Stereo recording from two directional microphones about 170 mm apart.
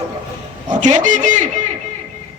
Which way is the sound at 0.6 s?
45° right (ahead or behind).